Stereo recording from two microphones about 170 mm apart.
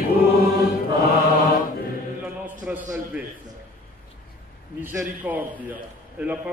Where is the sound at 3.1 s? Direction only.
5° right (ahead or behind).